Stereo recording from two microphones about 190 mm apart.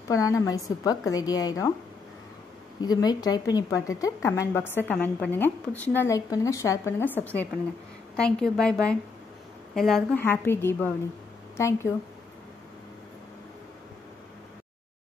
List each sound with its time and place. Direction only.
0.1 s a woman's voice: 15° left (ahead or behind)
2.8 s a woman's voice: 20° left (ahead or behind)
8.2 s a woman's voice: 5° left (ahead or behind)